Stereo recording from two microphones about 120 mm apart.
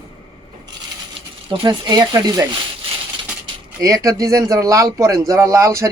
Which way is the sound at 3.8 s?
30° right (ahead or behind).